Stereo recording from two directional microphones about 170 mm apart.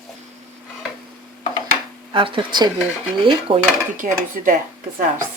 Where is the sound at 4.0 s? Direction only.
50° right (ahead or behind).